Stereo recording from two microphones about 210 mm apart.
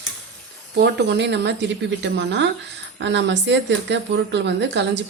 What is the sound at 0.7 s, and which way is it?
Speech, 55° right (ahead or behind).